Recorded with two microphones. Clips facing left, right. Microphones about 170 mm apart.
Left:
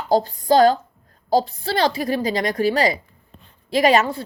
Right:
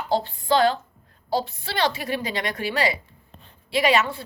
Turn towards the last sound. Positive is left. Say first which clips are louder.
# left 4 dB
turn(degrees=40)  # may be behind; listen again after turning